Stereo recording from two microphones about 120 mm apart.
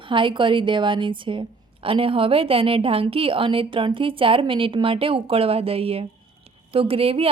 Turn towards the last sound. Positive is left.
turn(degrees=-50)  # may be behind; listen again after turning